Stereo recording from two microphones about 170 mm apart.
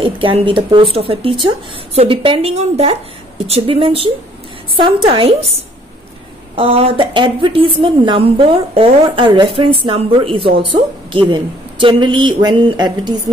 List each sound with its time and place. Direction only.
0.0 s a woman's voice: 30° right (ahead or behind)
6.5 s a woman's voice: 35° right (ahead or behind)